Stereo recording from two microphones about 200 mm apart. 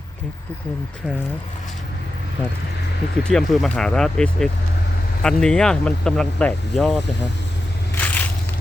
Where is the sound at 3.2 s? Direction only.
Centre (ahead or behind).